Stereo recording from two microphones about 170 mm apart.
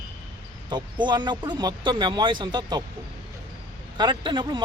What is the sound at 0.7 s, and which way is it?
A man's voice, 25° right (ahead or behind).